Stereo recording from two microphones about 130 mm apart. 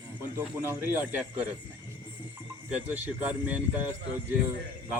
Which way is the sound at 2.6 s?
10° right (ahead or behind).